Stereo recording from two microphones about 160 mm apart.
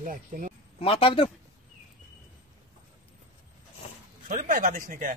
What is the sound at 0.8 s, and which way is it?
Speech, 35° left (ahead or behind).